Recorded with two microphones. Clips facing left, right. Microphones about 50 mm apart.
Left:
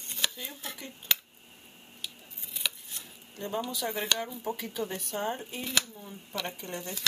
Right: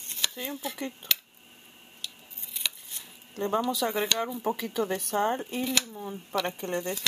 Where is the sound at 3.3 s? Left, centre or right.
Right.